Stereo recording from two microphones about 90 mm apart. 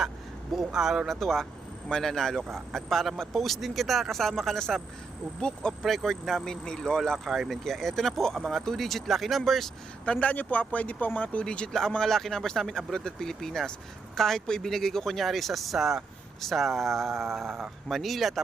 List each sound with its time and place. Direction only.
0.5 s speech: 5° right (ahead or behind)
10.1 s speech: 15° left (ahead or behind); by 18.4 s centre (ahead or behind)